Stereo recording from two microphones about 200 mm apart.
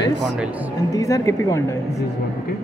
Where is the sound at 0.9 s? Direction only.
15° left (ahead or behind).